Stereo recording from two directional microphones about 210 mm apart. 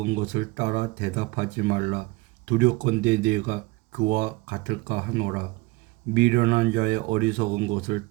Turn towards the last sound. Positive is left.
turn(degrees=-40)  # may be behind; listen again after turning